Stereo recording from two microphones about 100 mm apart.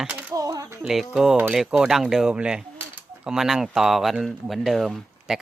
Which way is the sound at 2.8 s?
15° right (ahead or behind).